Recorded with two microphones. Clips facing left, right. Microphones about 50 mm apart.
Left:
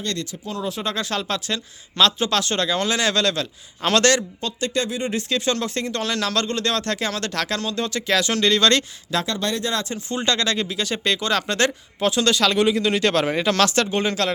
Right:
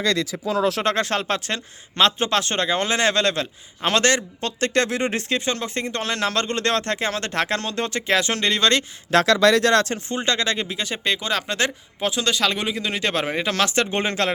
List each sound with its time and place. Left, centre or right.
0.6 s speech: right
0.9 s speech: right
4.4 s speech: right
5.3 s speech: right
9.2 s speech: right
10.2 s speech: centre
13.9 s speech: right